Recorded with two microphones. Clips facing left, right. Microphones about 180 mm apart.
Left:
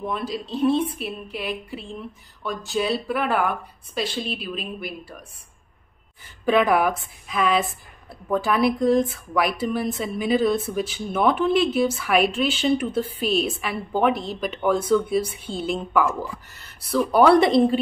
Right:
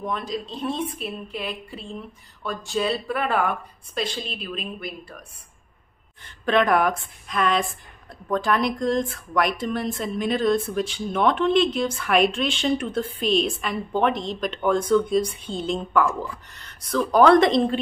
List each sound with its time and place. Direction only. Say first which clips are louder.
0.0 s a woman's voice: left 1 dB; 5° left (ahead or behind)
6.2 s a woman's voice: left 1 dB; 5° left (ahead or behind)